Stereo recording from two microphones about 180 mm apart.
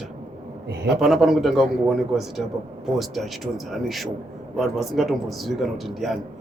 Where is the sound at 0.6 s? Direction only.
70° right (ahead or behind).